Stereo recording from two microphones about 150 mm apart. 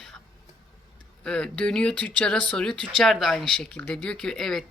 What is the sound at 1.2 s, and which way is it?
A woman's voice, 5° left (ahead or behind).